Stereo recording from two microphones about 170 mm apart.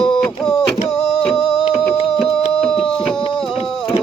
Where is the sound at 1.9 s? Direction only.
30° left (ahead or behind).